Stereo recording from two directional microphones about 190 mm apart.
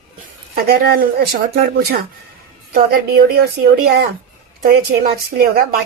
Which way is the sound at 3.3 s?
55° right (ahead or behind).